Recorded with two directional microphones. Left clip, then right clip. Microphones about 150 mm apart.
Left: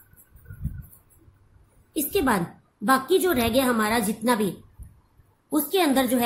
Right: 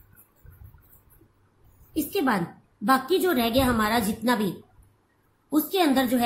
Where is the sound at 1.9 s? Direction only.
30° left (ahead or behind).